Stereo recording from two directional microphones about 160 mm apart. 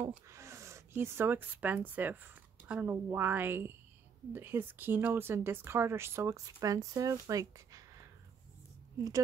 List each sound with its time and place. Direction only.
0.3 s speech: 15° right (ahead or behind)